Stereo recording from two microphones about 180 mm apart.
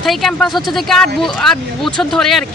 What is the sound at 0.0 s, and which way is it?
Speech, centre (ahead or behind).